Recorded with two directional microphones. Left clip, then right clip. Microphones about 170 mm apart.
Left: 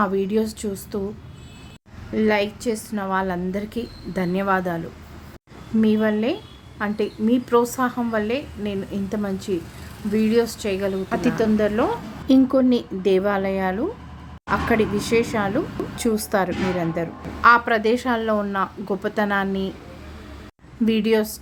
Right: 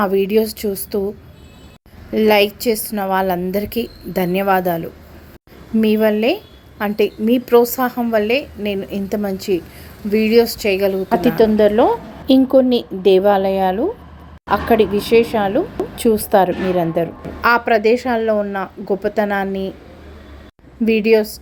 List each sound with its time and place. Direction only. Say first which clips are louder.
0.3 s a woman's voice: right 7 dB; 15° right (ahead or behind)
2.1 s a woman's voice: right 8 dB; 20° right (ahead or behind)
5.8 s a woman's voice: right 6 dB; 20° right (ahead or behind)
20.8 s a woman's voice: right 6 dB; 15° right (ahead or behind)